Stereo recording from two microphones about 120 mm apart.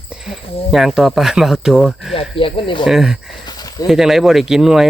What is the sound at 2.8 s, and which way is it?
Speech, 5° right (ahead or behind).